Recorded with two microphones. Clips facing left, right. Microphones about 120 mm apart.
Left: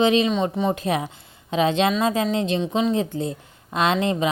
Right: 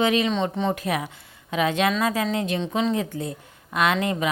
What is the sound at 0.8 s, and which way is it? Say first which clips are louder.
A woman's voice: left 3 dB; 25° left (ahead or behind).